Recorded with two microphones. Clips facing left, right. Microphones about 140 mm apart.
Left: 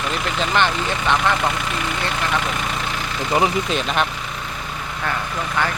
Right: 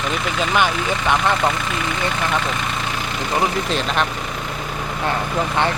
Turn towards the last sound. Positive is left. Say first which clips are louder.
# right 3 dB
turn(degrees=-25)  # may be behind; listen again after turning